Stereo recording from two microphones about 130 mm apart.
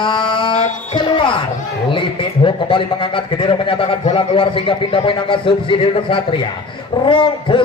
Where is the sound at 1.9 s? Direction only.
40° left (ahead or behind).